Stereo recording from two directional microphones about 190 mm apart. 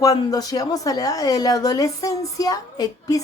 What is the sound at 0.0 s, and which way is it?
Speech, 20° left (ahead or behind).